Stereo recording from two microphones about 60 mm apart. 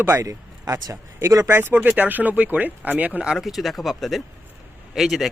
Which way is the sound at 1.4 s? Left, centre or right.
Right.